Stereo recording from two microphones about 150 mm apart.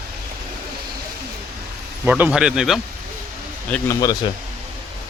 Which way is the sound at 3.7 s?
20° left (ahead or behind).